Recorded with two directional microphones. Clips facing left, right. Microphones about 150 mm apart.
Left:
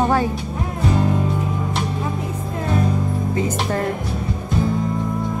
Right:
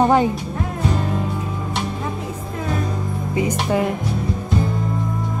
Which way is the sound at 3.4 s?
10° right (ahead or behind).